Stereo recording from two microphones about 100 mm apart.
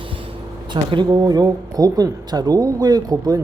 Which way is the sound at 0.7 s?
50° right (ahead or behind).